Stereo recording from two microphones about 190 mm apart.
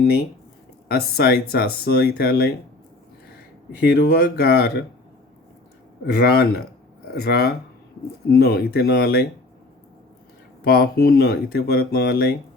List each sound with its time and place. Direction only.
0.0 s speech: 55° left (ahead or behind)
3.8 s speech: 60° left (ahead or behind)
6.1 s speech: 60° left (ahead or behind)
10.6 s speech: 55° left (ahead or behind)